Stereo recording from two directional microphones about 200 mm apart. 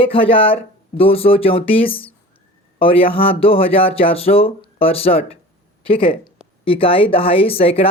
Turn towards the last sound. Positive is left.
turn(degrees=30)  # may be behind; listen again after turning